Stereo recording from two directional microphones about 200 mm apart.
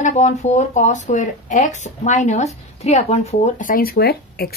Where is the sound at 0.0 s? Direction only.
35° left (ahead or behind).